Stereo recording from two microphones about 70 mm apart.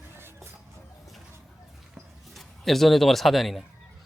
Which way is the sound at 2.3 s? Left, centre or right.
Centre.